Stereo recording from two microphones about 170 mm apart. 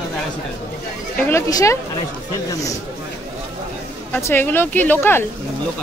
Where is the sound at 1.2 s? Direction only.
15° left (ahead or behind).